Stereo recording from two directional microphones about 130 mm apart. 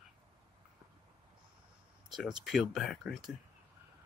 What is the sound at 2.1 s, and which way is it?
Speech, 5° right (ahead or behind).